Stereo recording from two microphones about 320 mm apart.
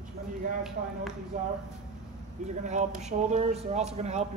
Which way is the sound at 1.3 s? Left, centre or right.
Right.